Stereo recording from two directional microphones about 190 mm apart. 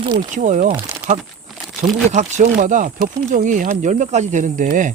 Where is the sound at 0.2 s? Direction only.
40° right (ahead or behind).